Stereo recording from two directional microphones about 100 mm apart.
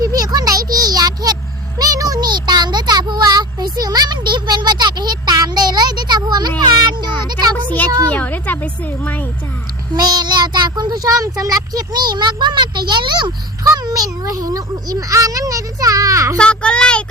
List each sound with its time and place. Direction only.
0.0 s a sound: 40° right (ahead or behind)
6.6 s a child's voice: 40° right (ahead or behind)
8.1 s speech: 15° left (ahead or behind)
9.9 s a child's voice: 45° right (ahead or behind)
16.4 s a child's voice: 10° left (ahead or behind)